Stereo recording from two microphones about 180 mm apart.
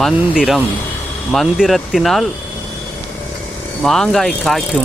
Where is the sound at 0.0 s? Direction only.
Centre (ahead or behind).